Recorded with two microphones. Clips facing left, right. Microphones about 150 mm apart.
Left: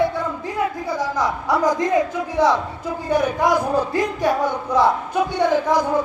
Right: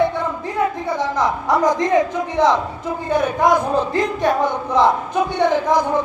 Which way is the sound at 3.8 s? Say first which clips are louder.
Right 2 dB; 10° left (ahead or behind).